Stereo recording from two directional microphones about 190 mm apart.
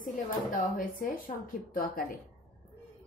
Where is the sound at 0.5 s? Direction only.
45° left (ahead or behind).